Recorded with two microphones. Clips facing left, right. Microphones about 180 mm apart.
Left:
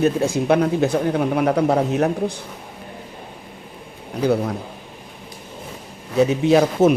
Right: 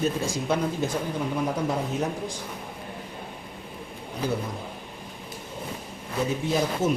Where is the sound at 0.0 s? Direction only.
65° left (ahead or behind).